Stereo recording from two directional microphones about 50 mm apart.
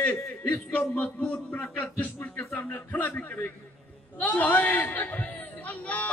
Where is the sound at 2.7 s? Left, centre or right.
Left.